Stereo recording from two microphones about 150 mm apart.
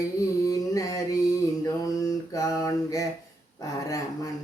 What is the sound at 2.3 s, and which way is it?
Mantra, 20° left (ahead or behind).